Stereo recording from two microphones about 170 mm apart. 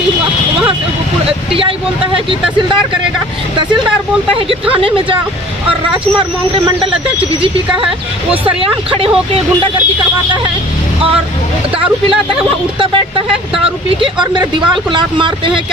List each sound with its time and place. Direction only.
4.5 s speech: 30° right (ahead or behind)
6.1 s speech: 30° right (ahead or behind)
8.5 s speech: 30° right (ahead or behind)
12.7 s speech: 30° right (ahead or behind)
14.2 s speech: 25° right (ahead or behind)